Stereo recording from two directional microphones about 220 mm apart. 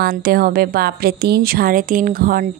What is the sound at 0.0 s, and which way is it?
A woman's voice, 40° right (ahead or behind).